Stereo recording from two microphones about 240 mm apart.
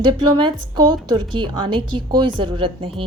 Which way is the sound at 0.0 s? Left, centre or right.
Centre.